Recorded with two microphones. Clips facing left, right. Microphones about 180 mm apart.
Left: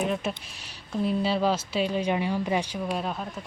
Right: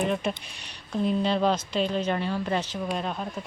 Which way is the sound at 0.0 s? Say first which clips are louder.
Right 1 dB; centre (ahead or behind).